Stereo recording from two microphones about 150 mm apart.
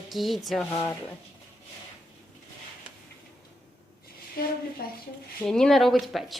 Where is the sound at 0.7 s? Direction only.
15° left (ahead or behind).